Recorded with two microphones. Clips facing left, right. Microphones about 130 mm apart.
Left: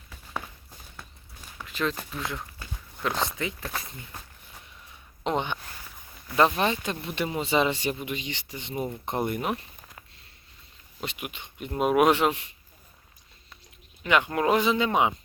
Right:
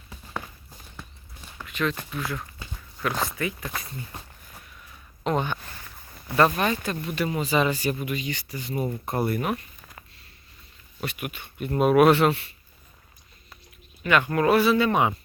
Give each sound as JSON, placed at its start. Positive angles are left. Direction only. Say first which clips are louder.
{"t": 1.6, "sound": "a sound", "louder": "right 2 dB", "side_deg": 30}
{"t": 3.0, "sound": "speech", "louder": "right 1 dB", "side_deg": 25}
{"t": 3.6, "sound": "speech", "louder": "right 1 dB", "side_deg": 0}
{"t": 5.2, "sound": "speech", "louder": "right 2 dB", "side_deg": 20}
{"t": 11.0, "sound": "a man's voice", "louder": "right 3 dB", "side_deg": 20}
{"t": 14.0, "sound": "a man's voice", "louder": "right 2 dB", "side_deg": 15}